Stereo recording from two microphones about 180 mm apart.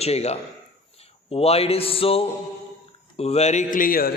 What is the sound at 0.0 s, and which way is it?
A man's voice, 35° left (ahead or behind).